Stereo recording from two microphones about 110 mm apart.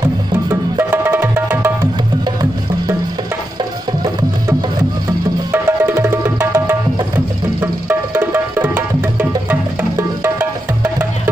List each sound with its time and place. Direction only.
0.5 s music: 20° right (ahead or behind)
5.5 s music: 20° right (ahead or behind)